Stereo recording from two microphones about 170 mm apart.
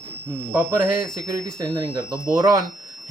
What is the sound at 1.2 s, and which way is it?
Speech, 20° right (ahead or behind).